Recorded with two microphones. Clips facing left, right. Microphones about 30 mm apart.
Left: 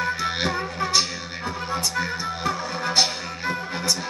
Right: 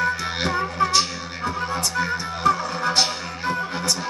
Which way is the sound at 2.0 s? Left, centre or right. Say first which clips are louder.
Right 2 dB; centre.